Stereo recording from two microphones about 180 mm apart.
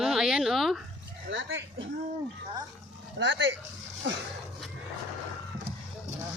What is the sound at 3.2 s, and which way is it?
Speech, 90° right.